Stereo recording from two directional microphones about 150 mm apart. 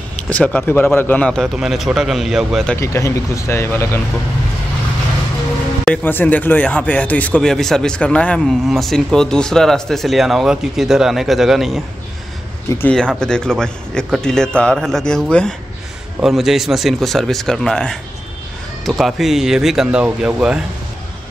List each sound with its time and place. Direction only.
0.1 s speech: 10° left (ahead or behind)
2.7 s speech: 20° left (ahead or behind)
5.9 s speech: 10° left (ahead or behind)
12.6 s speech: 15° left (ahead or behind)
12.9 s speech: 5° left (ahead or behind)